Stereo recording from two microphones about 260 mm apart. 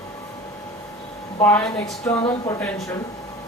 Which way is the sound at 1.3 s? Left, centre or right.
Centre.